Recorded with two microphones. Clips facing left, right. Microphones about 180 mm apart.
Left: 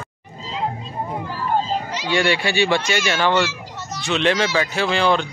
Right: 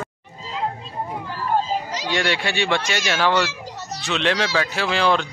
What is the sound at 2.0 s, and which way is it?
Speech, 5° left (ahead or behind).